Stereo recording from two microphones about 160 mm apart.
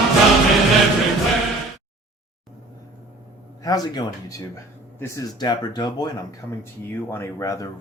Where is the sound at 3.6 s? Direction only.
25° left (ahead or behind).